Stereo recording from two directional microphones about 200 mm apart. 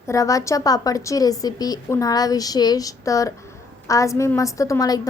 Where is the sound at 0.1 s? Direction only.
15° left (ahead or behind).